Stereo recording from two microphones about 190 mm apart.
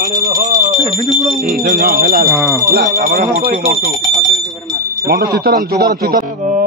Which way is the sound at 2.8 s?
40° right (ahead or behind).